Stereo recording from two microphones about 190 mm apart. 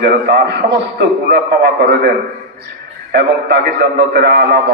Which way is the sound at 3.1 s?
60° right (ahead or behind).